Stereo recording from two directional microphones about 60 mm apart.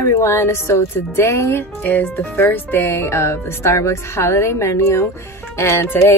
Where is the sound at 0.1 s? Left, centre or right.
Left.